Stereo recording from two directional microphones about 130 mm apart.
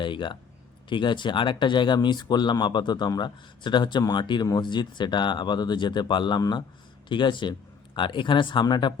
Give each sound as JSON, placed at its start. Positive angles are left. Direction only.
{"t": 0.0, "sound": "speech", "side_deg": 40}